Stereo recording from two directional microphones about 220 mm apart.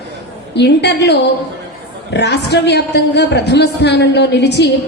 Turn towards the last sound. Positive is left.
turn(degrees=50)  # may be behind; listen again after turning